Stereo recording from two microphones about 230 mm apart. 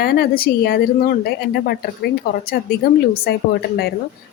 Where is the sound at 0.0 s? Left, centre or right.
Left.